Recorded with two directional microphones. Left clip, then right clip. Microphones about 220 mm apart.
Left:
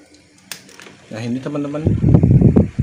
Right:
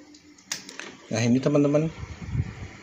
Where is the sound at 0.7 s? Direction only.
15° right (ahead or behind).